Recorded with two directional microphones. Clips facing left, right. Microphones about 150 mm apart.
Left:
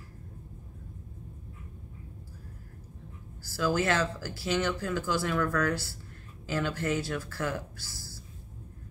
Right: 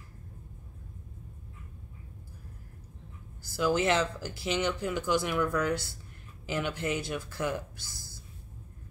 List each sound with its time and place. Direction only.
3.4 s speech: 20° right (ahead or behind)